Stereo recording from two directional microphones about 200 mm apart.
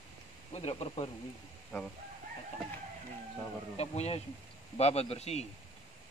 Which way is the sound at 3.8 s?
30° left (ahead or behind).